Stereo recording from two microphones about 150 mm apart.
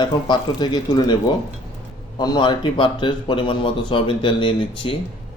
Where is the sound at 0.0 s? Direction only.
30° left (ahead or behind).